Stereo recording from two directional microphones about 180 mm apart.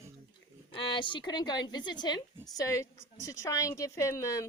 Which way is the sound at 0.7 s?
30° left (ahead or behind).